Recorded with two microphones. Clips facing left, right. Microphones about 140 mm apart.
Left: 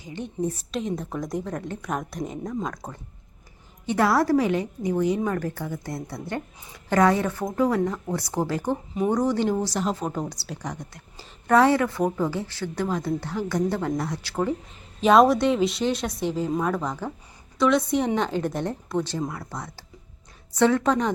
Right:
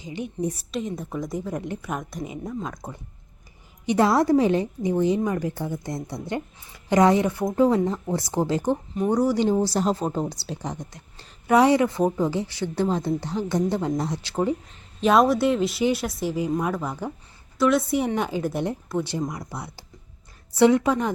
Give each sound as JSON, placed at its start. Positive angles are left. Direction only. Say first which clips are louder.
{"t": 0.0, "sound": "speech", "louder": "even", "side_deg": -15}
{"t": 0.7, "sound": "speech", "louder": "left 1 dB", "side_deg": 0}
{"t": 1.5, "sound": "a woman's voice", "louder": "even", "side_deg": -15}
{"t": 9.5, "sound": "a woman's voice", "louder": "right 3 dB", "side_deg": -30}
{"t": 12.7, "sound": "a woman's voice", "louder": "right 2 dB", "side_deg": -25}
{"t": 15.0, "sound": "speech", "louder": "left 1 dB", "side_deg": 0}